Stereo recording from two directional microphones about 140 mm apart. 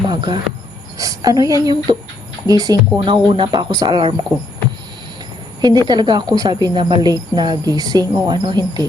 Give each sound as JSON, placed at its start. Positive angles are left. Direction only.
{"t": 0.1, "sound": "cricket", "side_deg": -35}
{"t": 0.9, "sound": "speech", "side_deg": -25}
{"t": 5.6, "sound": "a woman's voice", "side_deg": -30}